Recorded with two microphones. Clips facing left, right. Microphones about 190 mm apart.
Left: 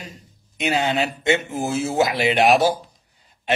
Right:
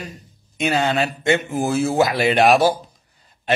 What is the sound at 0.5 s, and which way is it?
A man's voice, 15° left (ahead or behind).